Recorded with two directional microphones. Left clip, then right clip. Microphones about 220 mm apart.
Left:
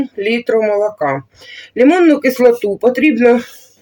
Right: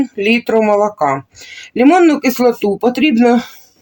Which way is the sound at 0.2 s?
35° right (ahead or behind).